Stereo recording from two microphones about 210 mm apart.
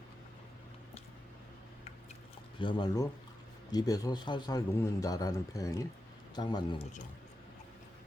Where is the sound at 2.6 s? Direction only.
20° left (ahead or behind).